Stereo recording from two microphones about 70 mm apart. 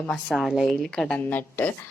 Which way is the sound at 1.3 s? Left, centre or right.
Left.